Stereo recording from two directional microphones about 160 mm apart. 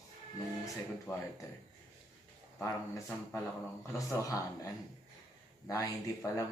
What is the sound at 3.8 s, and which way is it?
Speech, 20° left (ahead or behind).